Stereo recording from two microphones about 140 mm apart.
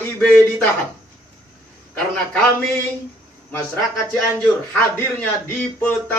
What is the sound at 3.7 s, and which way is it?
Speech, 10° left (ahead or behind).